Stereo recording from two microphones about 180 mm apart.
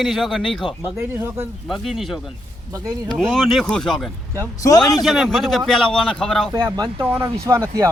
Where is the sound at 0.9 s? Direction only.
10° right (ahead or behind).